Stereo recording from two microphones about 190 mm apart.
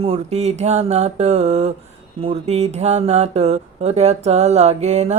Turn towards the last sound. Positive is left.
turn(degrees=-35)  # may be behind; listen again after turning